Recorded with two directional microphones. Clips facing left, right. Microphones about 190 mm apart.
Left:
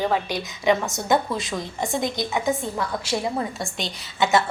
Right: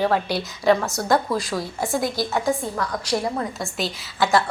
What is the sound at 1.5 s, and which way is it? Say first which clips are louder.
Speech: right 2 dB; 5° right (ahead or behind).